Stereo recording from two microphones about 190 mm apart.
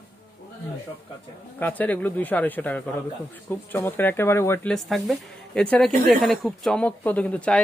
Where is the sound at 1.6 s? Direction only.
10° left (ahead or behind).